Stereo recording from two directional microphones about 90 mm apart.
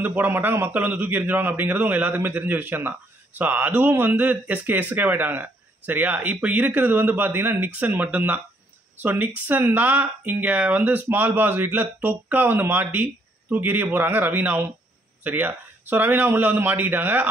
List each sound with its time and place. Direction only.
0.0 s a man's voice: 20° right (ahead or behind)